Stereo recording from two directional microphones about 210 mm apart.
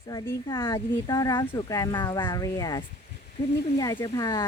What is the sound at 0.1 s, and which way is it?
Speech, 20° left (ahead or behind).